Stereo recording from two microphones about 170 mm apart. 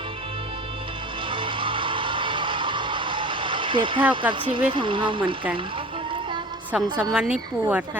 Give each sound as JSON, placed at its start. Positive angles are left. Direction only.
{"t": 1.3, "sound": "music", "side_deg": -30}
{"t": 4.1, "sound": "speech", "side_deg": -30}
{"t": 7.0, "sound": "a woman's voice", "side_deg": -5}